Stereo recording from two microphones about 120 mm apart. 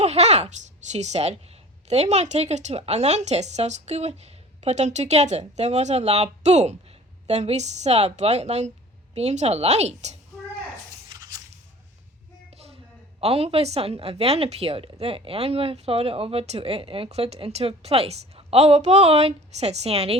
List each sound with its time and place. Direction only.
0.0 s speech: 65° right (ahead or behind)
12.5 s a woman's voice: 60° right (ahead or behind)